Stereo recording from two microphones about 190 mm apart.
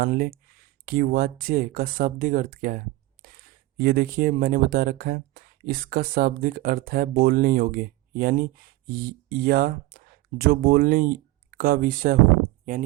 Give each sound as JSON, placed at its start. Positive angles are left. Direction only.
{"t": 0.0, "sound": "speech", "side_deg": -50}